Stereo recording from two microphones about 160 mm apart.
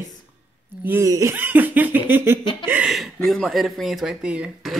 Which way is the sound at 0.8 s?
15° right (ahead or behind).